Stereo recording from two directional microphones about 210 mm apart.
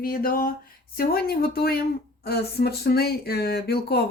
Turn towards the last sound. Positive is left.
turn(degrees=50)  # may be behind; listen again after turning